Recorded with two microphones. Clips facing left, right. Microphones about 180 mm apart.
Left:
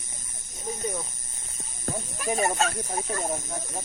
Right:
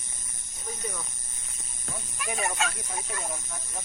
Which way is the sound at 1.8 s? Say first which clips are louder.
Left 7 dB; 40° left (ahead or behind).